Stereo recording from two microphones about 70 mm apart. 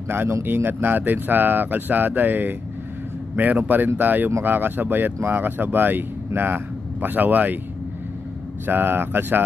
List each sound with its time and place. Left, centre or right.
0.3 s speech: right
8.6 s speech: right